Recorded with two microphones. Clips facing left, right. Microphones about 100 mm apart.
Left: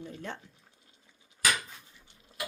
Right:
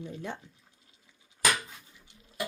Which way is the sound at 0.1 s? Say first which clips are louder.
Right 3 dB; 15° right (ahead or behind).